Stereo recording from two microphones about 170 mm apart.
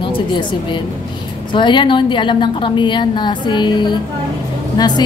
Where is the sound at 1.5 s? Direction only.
30° left (ahead or behind).